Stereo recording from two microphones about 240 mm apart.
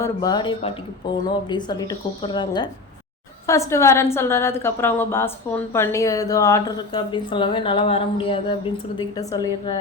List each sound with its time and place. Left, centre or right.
0.0 s a woman's voice: centre